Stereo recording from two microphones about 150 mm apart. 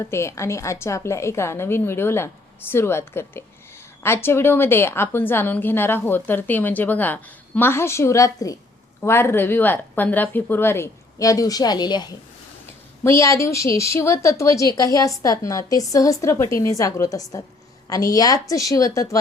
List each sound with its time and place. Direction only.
0.0 s a woman's voice: 15° left (ahead or behind)